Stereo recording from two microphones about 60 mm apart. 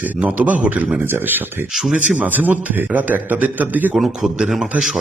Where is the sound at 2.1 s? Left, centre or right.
Right.